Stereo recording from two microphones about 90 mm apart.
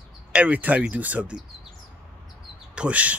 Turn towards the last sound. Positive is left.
turn(degrees=-15)  # may be behind; listen again after turning